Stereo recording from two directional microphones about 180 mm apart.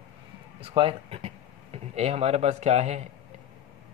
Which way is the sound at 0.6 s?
30° right (ahead or behind).